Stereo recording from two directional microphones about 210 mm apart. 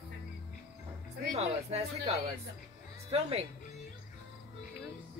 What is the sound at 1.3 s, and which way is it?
Speech, 30° right (ahead or behind).